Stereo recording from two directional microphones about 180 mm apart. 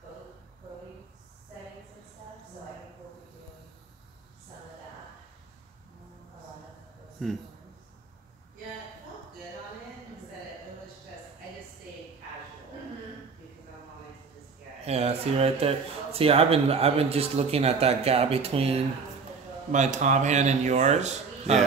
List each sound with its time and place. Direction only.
7.2 s a man's voice: 5° right (ahead or behind)
14.9 s speech: 35° right (ahead or behind)